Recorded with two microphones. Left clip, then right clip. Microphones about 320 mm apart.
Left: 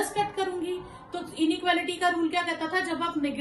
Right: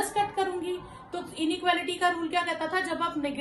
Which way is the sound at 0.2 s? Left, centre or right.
Centre.